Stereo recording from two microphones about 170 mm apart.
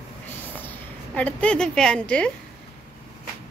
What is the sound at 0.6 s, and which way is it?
A woman's voice, 10° left (ahead or behind).